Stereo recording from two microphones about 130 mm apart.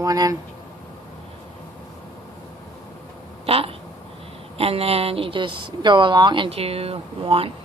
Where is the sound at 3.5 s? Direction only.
45° right (ahead or behind).